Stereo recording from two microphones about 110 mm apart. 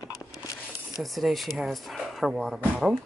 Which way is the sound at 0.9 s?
Centre (ahead or behind).